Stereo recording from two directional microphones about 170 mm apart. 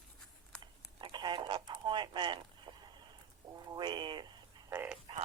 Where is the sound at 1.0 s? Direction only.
25° right (ahead or behind).